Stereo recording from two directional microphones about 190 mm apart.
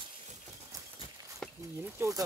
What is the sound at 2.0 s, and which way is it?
Speech, 15° right (ahead or behind).